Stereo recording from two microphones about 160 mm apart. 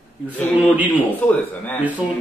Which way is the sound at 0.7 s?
10° right (ahead or behind).